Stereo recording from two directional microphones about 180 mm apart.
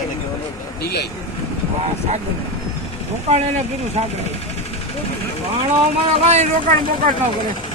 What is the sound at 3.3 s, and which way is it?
Speech, 35° right (ahead or behind).